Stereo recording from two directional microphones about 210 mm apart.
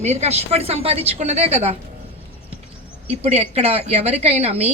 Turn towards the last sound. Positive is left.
turn(degrees=-30)  # may be behind; listen again after turning